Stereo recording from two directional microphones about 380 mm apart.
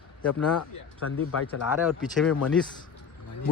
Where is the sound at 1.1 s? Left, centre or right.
Left.